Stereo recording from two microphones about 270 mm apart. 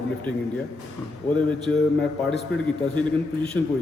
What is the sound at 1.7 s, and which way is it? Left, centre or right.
Speech, left.